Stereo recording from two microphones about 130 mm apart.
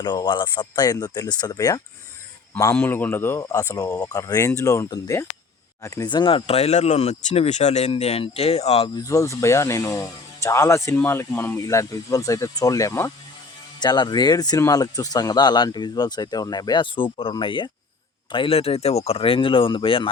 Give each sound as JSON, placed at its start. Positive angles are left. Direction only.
{"t": 0.0, "sound": "speech", "side_deg": 35}
{"t": 2.7, "sound": "speech", "side_deg": 15}
{"t": 9.0, "sound": "speech", "side_deg": 25}